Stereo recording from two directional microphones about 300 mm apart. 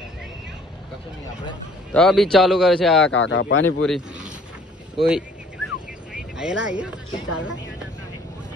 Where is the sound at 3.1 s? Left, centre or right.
Left.